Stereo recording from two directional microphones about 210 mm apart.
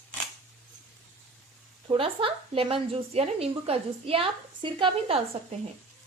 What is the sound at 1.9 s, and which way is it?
A woman's voice, 25° right (ahead or behind).